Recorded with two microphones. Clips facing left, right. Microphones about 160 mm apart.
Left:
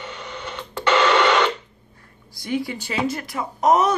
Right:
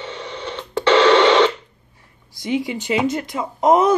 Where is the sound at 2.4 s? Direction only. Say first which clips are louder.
Right 4 dB; 15° right (ahead or behind).